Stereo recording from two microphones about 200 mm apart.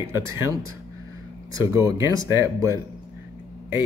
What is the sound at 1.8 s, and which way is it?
Speech, 15° right (ahead or behind).